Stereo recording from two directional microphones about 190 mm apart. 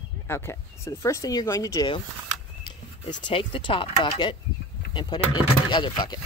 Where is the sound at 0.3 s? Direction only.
15° left (ahead or behind).